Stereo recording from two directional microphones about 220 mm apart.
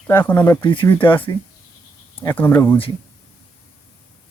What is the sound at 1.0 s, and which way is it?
Speech, 25° left (ahead or behind).